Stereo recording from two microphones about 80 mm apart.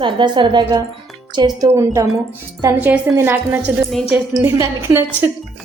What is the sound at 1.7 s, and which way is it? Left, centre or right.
Speech, right.